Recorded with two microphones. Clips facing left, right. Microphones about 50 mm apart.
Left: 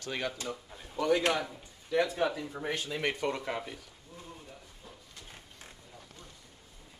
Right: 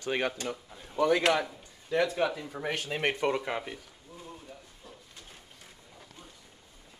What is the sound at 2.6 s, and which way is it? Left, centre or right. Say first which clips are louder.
Speech: right 2 dB; right.